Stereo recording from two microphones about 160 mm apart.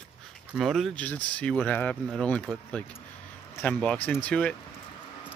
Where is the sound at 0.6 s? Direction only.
Centre (ahead or behind).